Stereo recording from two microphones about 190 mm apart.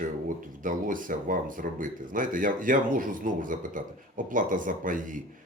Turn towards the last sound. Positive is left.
turn(degrees=-45)  # may be behind; listen again after turning